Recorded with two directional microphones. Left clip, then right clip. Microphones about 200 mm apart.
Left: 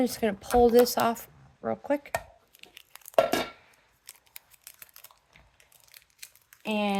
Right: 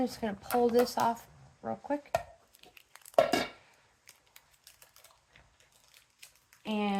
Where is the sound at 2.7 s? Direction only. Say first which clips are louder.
Left 3 dB; 25° left (ahead or behind).